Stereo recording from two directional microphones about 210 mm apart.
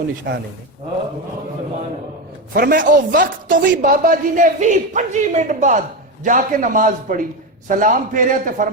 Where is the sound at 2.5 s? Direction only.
45° right (ahead or behind).